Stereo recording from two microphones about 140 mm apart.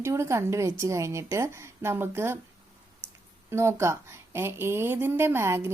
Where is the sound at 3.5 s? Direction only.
20° right (ahead or behind).